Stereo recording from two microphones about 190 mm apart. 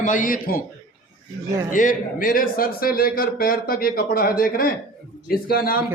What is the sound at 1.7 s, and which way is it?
A man's voice, 45° left (ahead or behind).